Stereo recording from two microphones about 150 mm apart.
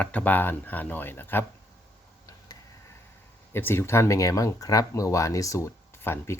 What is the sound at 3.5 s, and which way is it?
Speech, 15° left (ahead or behind).